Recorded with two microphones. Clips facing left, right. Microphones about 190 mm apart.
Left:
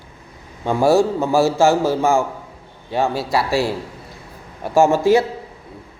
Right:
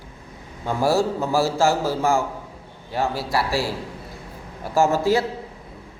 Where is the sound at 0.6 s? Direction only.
20° left (ahead or behind).